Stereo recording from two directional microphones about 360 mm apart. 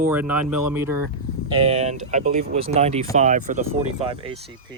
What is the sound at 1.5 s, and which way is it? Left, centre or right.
Speech, centre.